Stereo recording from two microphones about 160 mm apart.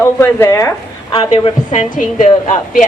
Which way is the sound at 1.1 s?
35° left (ahead or behind).